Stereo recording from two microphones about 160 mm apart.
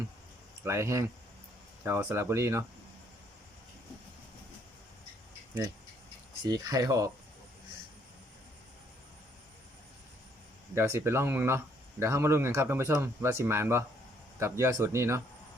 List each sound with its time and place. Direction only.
0.6 s speech: 15° right (ahead or behind)
6.4 s speech: 20° right (ahead or behind)
10.8 s speech: 15° right (ahead or behind)